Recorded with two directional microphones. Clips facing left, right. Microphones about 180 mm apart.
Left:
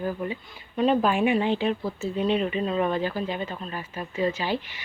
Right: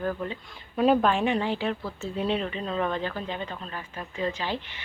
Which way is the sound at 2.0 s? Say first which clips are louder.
Left 3 dB; centre (ahead or behind).